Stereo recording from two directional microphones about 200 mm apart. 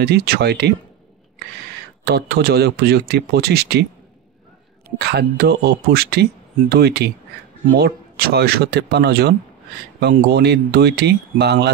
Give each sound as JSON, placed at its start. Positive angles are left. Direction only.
{"t": 0.0, "sound": "speech", "side_deg": -55}
{"t": 2.0, "sound": "speech", "side_deg": -50}
{"t": 4.8, "sound": "speech", "side_deg": -55}